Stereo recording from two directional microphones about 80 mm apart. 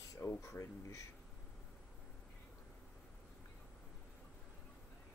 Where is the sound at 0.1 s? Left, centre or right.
Left.